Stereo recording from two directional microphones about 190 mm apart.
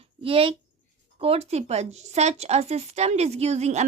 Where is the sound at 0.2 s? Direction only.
30° right (ahead or behind).